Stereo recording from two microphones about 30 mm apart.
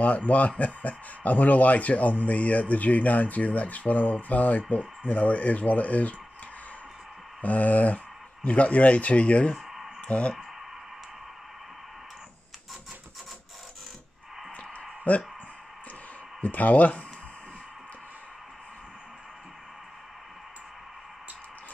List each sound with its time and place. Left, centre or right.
0.6 s speech: left
7.4 s speech: left
8.5 s speech: left
14.6 s a sound: left
16.3 s speech: left